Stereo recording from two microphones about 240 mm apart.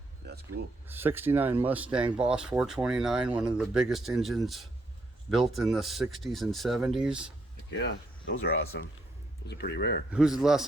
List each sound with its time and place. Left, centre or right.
0.2 s a sound: right
0.9 s speech: centre
7.7 s speech: left
10.1 s speech: centre